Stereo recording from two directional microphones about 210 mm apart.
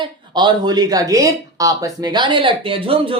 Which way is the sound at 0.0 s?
20° right (ahead or behind).